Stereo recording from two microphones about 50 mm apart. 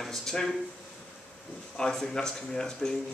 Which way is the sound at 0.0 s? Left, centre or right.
Centre.